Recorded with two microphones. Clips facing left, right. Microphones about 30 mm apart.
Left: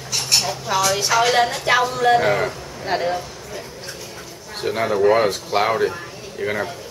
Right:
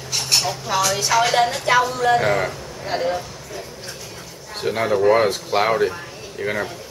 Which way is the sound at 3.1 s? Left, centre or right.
Centre.